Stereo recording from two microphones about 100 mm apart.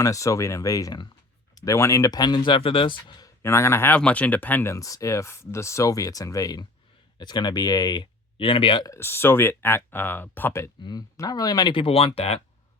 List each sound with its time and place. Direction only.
0.0 s speech: 35° left (ahead or behind); by 3.2 s 50° left (ahead or behind)
3.2 s speech: 30° left (ahead or behind)
3.9 s speech: 15° left (ahead or behind)
4.7 s speech: 35° left (ahead or behind)
8.4 s speech: 60° left (ahead or behind)
9.0 s speech: 25° left (ahead or behind)
10.8 s speech: 40° left (ahead or behind)
11.7 s speech: 70° left (ahead or behind); by 12.4 s 85° left